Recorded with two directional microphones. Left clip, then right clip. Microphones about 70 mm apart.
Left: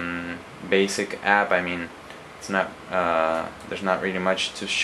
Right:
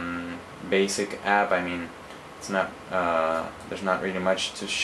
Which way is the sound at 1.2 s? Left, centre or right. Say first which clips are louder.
Left 3 dB; left.